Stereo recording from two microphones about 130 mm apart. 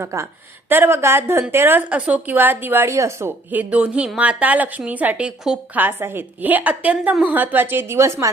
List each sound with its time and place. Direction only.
0.0 s a woman's voice: 20° right (ahead or behind); by 5.8 s 5° right (ahead or behind)
5.8 s a woman's voice: 15° right (ahead or behind)